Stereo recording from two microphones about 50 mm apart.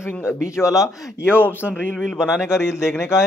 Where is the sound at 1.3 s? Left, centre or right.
Left.